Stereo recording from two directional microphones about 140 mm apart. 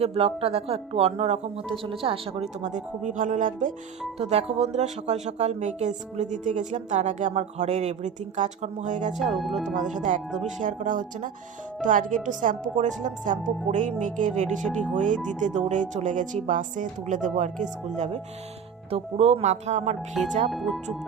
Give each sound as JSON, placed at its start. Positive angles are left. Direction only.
{"t": 0.0, "sound": "a woman's voice", "side_deg": -45}
{"t": 2.6, "sound": "speech", "side_deg": -60}
{"t": 4.2, "sound": "speech", "side_deg": -45}
{"t": 9.1, "sound": "speech", "side_deg": 0}
{"t": 9.7, "sound": "speech", "side_deg": -65}
{"t": 20.5, "sound": "speech", "side_deg": 0}